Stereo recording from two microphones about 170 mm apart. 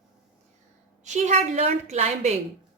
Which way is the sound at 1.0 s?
45° right (ahead or behind).